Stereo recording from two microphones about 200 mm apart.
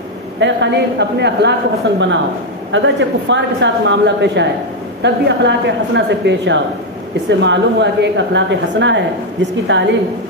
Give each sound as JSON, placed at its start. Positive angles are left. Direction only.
{"t": 0.4, "sound": "a woman's voice", "side_deg": -65}
{"t": 2.7, "sound": "a woman's voice", "side_deg": -70}